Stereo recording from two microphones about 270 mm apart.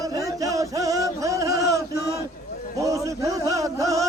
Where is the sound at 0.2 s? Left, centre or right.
Centre.